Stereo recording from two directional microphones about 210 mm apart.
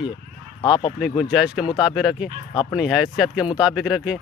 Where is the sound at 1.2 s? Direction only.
Centre (ahead or behind).